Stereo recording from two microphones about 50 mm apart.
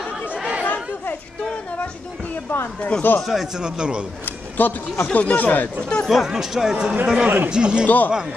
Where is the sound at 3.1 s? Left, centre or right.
Left.